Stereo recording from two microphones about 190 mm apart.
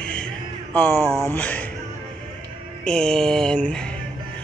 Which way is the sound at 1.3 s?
10° left (ahead or behind).